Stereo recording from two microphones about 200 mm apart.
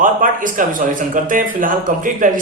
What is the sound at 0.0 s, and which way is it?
A man's voice, 40° right (ahead or behind).